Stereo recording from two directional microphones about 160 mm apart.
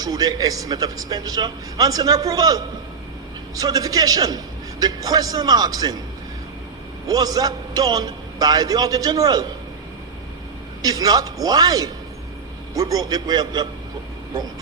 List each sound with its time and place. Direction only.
0.0 s a man's voice: 25° right (ahead or behind)
7.1 s a man's voice: 25° right (ahead or behind)
10.8 s a man's voice: 25° right (ahead or behind)